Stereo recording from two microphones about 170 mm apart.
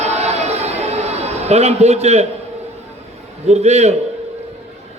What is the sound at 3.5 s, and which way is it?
Speech, 40° right (ahead or behind).